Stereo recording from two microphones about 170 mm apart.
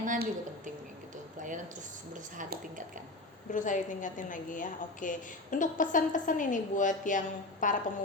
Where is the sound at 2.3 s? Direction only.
50° right (ahead or behind).